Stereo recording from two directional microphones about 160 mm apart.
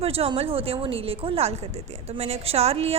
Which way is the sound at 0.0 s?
40° right (ahead or behind).